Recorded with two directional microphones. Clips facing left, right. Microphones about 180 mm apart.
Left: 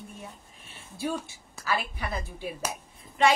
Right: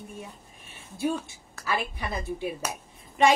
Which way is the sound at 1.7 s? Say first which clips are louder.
Right 1 dB; 20° right (ahead or behind).